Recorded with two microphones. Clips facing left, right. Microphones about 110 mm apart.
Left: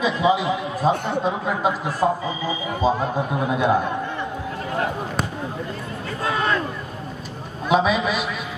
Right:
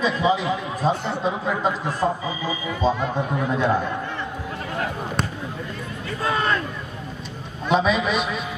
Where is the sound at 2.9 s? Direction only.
40° left (ahead or behind).